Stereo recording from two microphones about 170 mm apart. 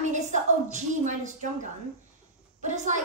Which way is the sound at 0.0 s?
45° right (ahead or behind).